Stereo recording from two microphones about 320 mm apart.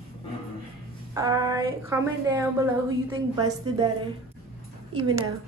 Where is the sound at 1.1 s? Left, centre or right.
Centre.